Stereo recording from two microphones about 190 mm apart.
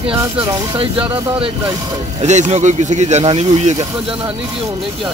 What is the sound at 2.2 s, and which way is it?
Speech, 35° right (ahead or behind).